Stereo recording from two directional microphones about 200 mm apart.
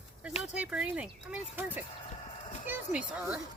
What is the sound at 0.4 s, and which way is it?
Speech, 5° right (ahead or behind).